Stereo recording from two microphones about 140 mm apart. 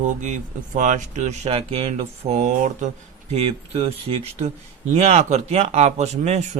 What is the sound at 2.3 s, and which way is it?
Speech, 60° right (ahead or behind).